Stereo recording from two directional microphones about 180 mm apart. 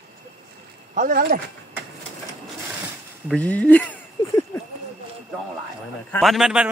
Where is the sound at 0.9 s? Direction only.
50° right (ahead or behind).